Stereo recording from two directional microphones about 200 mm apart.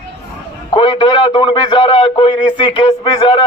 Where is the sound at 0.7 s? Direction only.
25° left (ahead or behind).